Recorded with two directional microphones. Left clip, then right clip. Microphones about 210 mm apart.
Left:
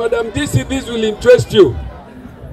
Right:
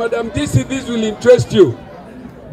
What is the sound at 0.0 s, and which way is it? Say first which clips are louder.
A man's voice: left 2 dB; 25° left (ahead or behind).